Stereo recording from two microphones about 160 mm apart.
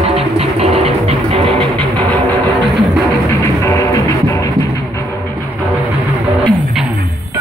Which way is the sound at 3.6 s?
20° left (ahead or behind).